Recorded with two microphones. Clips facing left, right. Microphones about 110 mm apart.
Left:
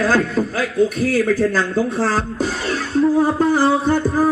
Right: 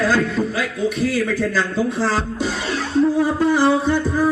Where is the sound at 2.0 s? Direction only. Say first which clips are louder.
Left 1 dB; centre (ahead or behind).